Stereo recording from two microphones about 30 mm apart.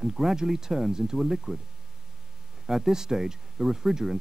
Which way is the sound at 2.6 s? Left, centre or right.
Centre.